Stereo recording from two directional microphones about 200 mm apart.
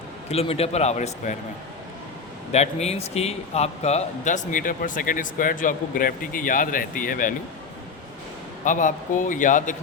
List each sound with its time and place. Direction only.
0.3 s a man's voice: 30° left (ahead or behind)
2.5 s a man's voice: 35° left (ahead or behind)
8.6 s a man's voice: 40° left (ahead or behind)